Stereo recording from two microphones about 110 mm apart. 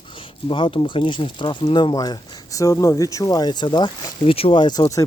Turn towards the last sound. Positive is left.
turn(degrees=35)  # may be behind; listen again after turning